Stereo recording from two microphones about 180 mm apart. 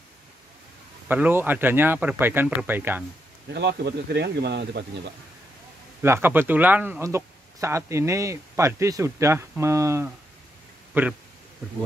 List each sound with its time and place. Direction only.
1.0 s speech: 10° right (ahead or behind)
3.4 s speech: 65° right (ahead or behind)
6.0 s speech: 10° right (ahead or behind)